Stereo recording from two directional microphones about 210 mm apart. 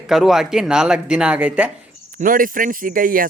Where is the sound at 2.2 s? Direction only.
40° right (ahead or behind).